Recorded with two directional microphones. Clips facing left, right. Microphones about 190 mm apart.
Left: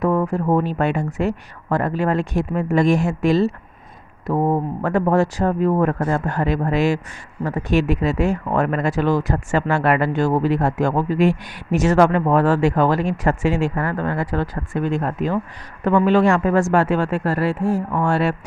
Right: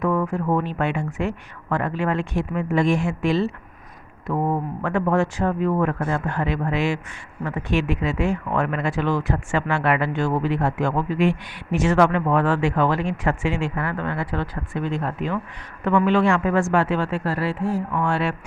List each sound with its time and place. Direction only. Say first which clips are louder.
0.0 s speech: left 3 dB; 35° left (ahead or behind)